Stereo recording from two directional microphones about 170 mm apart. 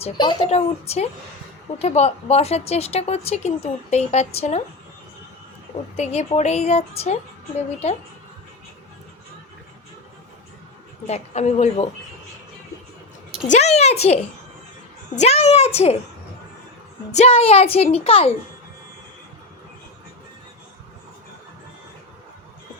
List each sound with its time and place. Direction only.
0.0 s a woman's voice: 25° left (ahead or behind)
0.4 s a woman's voice: 40° left (ahead or behind)
6.0 s a woman's voice: 40° left (ahead or behind)
11.0 s a woman's voice: 40° left (ahead or behind)
13.5 s a woman's voice: 40° left (ahead or behind)
15.2 s a woman's voice: 40° left (ahead or behind)
17.1 s a woman's voice: 40° left (ahead or behind)